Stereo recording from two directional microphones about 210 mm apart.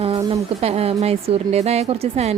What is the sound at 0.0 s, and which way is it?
A woman's voice, 30° right (ahead or behind).